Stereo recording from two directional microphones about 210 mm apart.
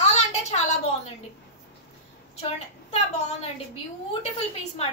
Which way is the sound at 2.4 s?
30° left (ahead or behind).